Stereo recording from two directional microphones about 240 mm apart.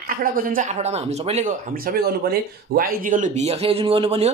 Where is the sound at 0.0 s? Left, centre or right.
Right.